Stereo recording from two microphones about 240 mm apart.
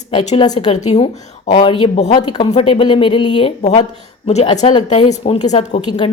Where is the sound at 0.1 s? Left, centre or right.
Left.